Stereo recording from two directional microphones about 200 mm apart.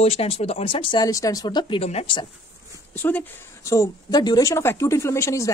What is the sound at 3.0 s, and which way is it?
Speech, 10° left (ahead or behind).